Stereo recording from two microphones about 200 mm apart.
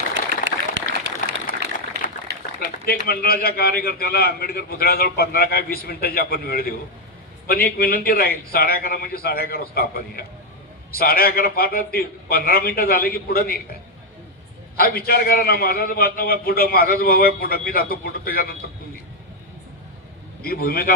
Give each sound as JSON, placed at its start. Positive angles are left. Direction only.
{"t": 0.4, "sound": "a sound", "side_deg": -65}
{"t": 2.6, "sound": "a man's voice", "side_deg": 45}
{"t": 14.8, "sound": "a man's voice", "side_deg": 50}
{"t": 20.4, "sound": "a man's voice", "side_deg": 50}